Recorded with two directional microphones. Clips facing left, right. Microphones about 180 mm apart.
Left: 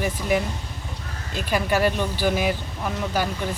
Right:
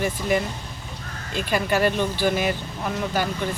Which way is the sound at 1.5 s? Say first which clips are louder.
Even; 5° left (ahead or behind).